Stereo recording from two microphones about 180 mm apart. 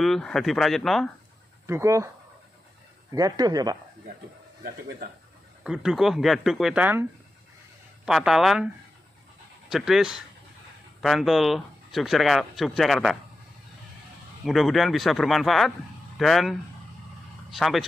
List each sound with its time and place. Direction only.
0.0 s speech: centre (ahead or behind)
1.7 s speech: 15° right (ahead or behind)
3.1 s speech: 20° right (ahead or behind)
5.6 s speech: 5° right (ahead or behind)
9.7 s speech: centre (ahead or behind)
14.4 s speech: centre (ahead or behind)